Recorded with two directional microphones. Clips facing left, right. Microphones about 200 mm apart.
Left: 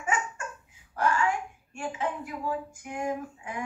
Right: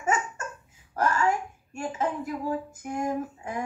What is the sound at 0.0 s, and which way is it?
Laughter, 40° right (ahead or behind).